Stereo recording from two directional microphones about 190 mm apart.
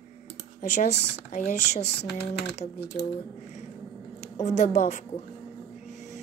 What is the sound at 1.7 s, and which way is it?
Speech, 60° left (ahead or behind).